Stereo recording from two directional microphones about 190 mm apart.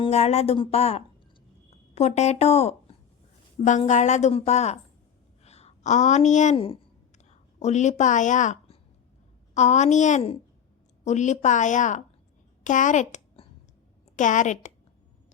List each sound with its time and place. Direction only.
0.0 s a woman's voice: 35° left (ahead or behind)